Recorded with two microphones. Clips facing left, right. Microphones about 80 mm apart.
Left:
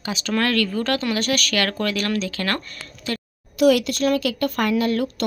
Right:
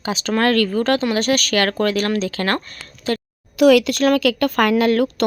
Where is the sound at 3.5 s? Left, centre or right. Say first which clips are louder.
Right 4 dB; right.